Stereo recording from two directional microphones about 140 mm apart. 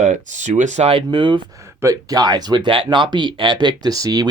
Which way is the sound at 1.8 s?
25° right (ahead or behind).